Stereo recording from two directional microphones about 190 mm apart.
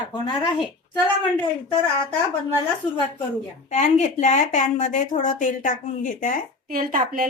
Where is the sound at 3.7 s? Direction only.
40° left (ahead or behind).